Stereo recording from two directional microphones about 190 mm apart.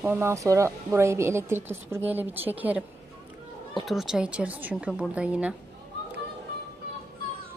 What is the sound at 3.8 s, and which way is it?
Speech, centre (ahead or behind).